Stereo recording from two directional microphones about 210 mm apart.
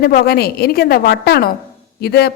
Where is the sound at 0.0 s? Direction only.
45° left (ahead or behind).